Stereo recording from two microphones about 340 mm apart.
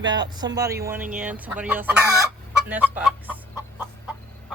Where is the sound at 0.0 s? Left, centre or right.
Centre.